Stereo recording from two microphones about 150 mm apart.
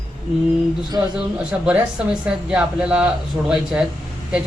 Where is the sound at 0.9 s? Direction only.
20° right (ahead or behind).